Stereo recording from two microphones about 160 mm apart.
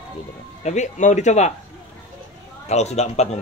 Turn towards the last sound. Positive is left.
turn(degrees=45)  # may be behind; listen again after turning